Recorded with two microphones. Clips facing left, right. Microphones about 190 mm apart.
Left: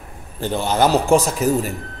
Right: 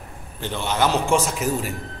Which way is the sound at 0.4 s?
40° left (ahead or behind).